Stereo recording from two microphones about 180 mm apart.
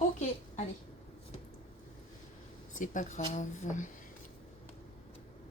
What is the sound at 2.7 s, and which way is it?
Speech, 45° left (ahead or behind).